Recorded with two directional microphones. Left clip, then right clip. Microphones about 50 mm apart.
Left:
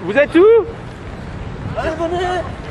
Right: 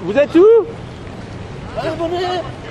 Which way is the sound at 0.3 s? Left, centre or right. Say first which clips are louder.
Right 1 dB; right.